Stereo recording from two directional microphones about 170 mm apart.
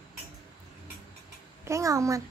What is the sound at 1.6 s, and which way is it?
Speech, 20° right (ahead or behind).